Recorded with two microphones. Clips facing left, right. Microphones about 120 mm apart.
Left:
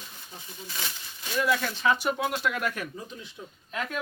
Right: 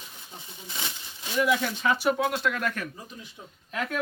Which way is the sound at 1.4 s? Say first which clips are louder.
Right 1 dB; 10° right (ahead or behind).